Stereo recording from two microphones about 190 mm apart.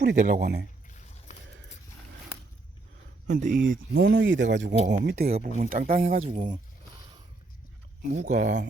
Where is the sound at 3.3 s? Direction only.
40° right (ahead or behind).